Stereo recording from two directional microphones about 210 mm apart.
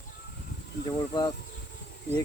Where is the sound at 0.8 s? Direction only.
20° left (ahead or behind).